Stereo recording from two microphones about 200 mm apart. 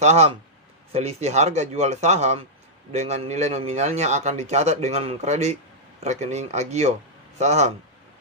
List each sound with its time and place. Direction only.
0.0 s a man's voice: 35° right (ahead or behind)